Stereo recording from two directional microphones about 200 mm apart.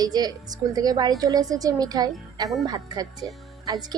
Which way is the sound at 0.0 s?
20° right (ahead or behind).